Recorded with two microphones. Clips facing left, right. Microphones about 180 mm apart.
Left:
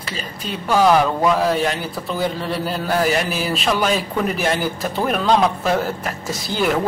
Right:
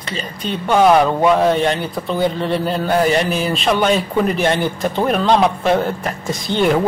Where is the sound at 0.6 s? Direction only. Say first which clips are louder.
Right 3 dB; 25° right (ahead or behind).